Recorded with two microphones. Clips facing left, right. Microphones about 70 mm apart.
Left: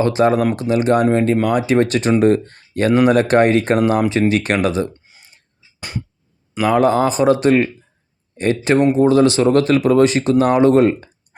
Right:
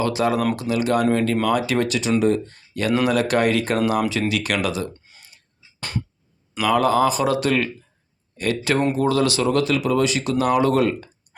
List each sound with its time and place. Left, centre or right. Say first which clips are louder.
0.0 s speech: left 6 dB; left
1.9 s speech: left 5 dB; left
5.0 s a sound: left 1 dB; centre
6.5 s speech: left 4 dB; left